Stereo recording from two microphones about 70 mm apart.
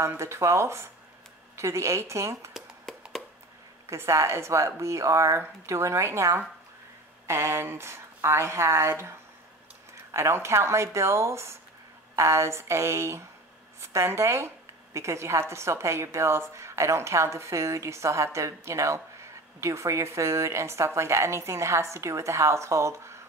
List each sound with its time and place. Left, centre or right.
0.1 s a woman's voice: right
3.9 s a woman's voice: right
10.1 s a woman's voice: right